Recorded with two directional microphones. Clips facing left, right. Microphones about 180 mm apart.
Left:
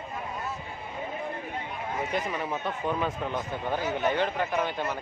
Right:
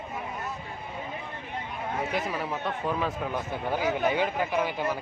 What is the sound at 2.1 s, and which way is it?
A man's voice, 5° right (ahead or behind).